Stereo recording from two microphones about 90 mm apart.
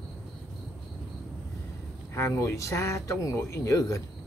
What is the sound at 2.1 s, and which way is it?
Speech, 30° left (ahead or behind).